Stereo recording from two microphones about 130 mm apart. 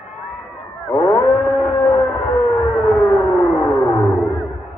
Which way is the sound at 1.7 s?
45° left (ahead or behind).